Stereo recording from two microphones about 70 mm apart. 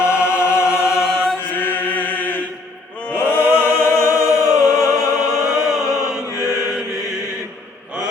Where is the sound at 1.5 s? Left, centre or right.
Left.